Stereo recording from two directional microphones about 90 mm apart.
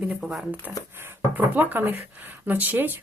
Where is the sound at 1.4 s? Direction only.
20° right (ahead or behind).